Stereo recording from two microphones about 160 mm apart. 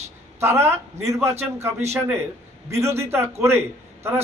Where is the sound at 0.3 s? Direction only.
15° right (ahead or behind).